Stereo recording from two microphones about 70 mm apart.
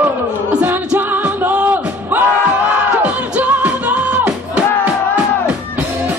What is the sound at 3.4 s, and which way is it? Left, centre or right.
Music, right.